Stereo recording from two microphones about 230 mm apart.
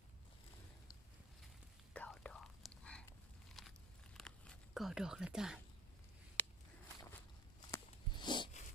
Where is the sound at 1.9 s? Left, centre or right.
Centre.